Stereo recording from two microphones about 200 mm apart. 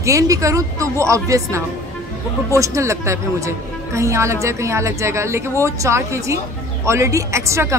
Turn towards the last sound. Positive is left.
turn(degrees=-15)  # may be behind; listen again after turning